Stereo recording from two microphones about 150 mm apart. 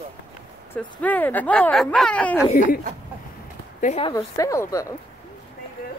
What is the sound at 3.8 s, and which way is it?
Speech, 50° left (ahead or behind).